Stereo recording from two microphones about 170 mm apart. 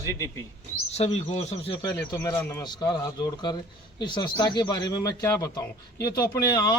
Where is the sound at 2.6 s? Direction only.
25° left (ahead or behind).